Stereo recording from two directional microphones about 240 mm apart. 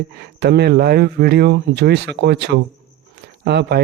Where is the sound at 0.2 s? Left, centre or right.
Right.